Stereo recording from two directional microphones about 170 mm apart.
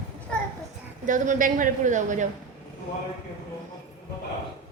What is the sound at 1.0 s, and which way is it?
A woman's voice, 50° right (ahead or behind).